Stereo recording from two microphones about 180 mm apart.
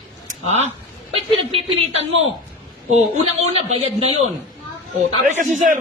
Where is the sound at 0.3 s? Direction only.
40° left (ahead or behind).